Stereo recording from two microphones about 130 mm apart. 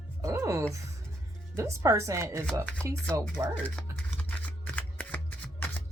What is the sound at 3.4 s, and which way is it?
Speech, 20° right (ahead or behind).